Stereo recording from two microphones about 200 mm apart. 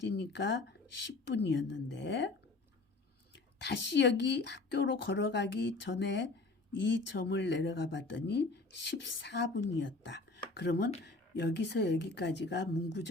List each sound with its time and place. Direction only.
0.1 s speech: 60° left (ahead or behind)
3.3 s speech: 55° left (ahead or behind)